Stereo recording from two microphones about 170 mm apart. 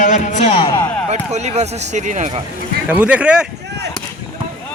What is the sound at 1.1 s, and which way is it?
Speech, 40° right (ahead or behind).